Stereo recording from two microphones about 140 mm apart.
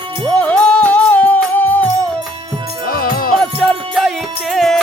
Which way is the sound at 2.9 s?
90° left.